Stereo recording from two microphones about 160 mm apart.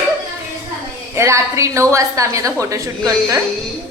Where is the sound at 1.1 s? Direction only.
15° right (ahead or behind).